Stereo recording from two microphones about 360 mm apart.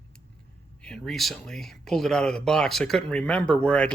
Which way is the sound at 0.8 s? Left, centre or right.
Centre.